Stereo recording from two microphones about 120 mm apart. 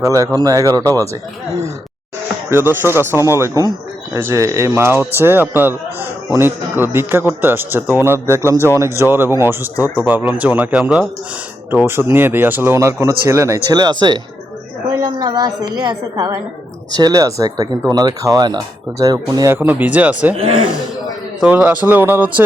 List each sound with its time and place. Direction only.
0.0 s speech: 25° right (ahead or behind)
2.5 s a man's voice: 20° right (ahead or behind)
8.5 s speech: 20° left (ahead or behind)
8.8 s a man's voice: 20° right (ahead or behind)
11.7 s speech: 20° right (ahead or behind)
19.5 s a man's voice: 10° right (ahead or behind)
20.3 s speech: 55° right (ahead or behind)
21.4 s a man's voice: 10° right (ahead or behind)